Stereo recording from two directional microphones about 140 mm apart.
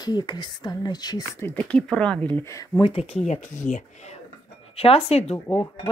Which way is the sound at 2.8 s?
45° left (ahead or behind).